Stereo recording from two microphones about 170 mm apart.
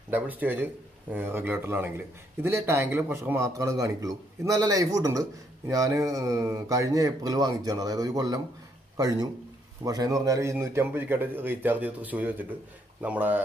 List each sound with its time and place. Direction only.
0.1 s a man's voice: 10° right (ahead or behind)